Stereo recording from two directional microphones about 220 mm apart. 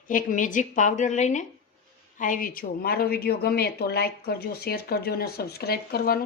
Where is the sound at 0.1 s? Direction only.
35° left (ahead or behind).